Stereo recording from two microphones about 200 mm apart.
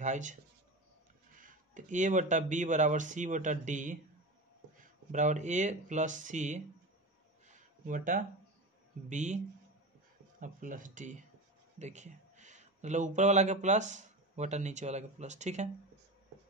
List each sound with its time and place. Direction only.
0.0 s speech: 40° right (ahead or behind)
7.4 s a sound: 40° right (ahead or behind)
9.1 s speech: 35° right (ahead or behind)
10.4 s a man's voice: 40° right (ahead or behind)